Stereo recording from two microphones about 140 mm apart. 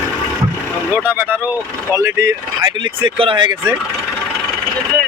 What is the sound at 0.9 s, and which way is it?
Speech, 10° right (ahead or behind).